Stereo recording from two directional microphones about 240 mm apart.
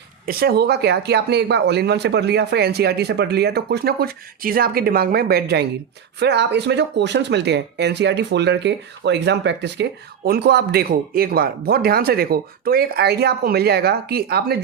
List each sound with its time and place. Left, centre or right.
0.3 s speech: right